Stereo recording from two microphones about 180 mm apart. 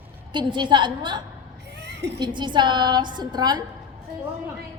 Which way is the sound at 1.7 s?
70° right (ahead or behind).